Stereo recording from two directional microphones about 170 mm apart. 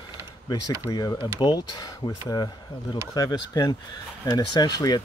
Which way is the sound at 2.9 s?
20° left (ahead or behind).